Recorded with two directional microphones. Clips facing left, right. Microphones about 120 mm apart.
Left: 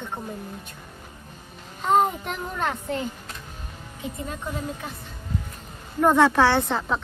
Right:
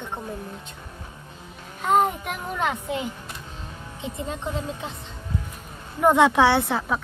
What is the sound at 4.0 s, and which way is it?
Speech, 25° right (ahead or behind).